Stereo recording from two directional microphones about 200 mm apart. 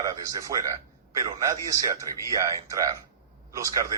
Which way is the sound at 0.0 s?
15° right (ahead or behind).